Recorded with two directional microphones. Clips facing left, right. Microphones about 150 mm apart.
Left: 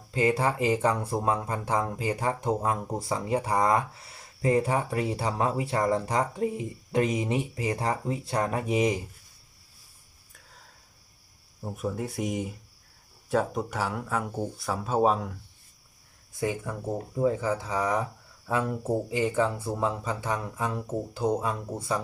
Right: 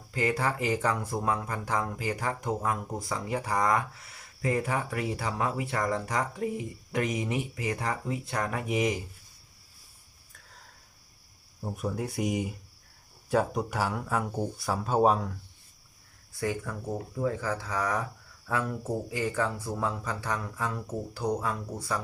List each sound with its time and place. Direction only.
0.1 s speech: 25° left (ahead or behind)
11.6 s speech: centre (ahead or behind)
16.3 s speech: 20° left (ahead or behind)